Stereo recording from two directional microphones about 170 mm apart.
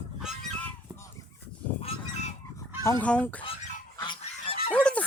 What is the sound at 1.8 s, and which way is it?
Goose, 35° left (ahead or behind).